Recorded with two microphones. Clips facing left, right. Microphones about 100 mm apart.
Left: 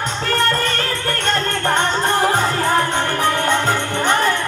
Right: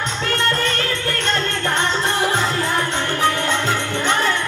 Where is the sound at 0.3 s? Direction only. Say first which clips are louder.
Left 2 dB; 40° left (ahead or behind).